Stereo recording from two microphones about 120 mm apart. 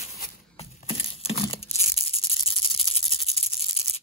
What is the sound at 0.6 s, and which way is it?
Tearing, 55° left (ahead or behind).